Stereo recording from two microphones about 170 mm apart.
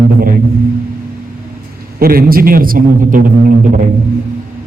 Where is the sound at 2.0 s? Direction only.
60° right (ahead or behind).